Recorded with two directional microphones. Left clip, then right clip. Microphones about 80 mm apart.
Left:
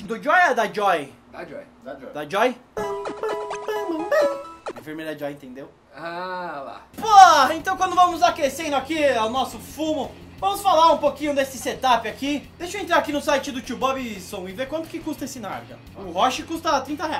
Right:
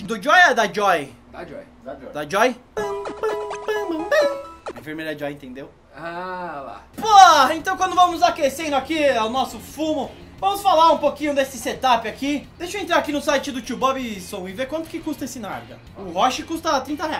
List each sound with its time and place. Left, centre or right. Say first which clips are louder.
0.1 s speech: right 4 dB; centre
2.1 s speech: right 2 dB; centre
3.0 s music: right 2 dB; centre
4.8 s speech: right 3 dB; centre
6.0 s a sound: even; centre
7.0 s speech: right 1 dB; centre